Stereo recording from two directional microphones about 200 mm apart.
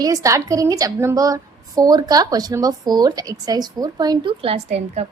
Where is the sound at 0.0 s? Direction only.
15° right (ahead or behind).